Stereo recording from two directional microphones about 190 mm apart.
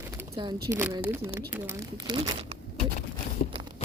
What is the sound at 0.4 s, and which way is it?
Speech, 25° right (ahead or behind).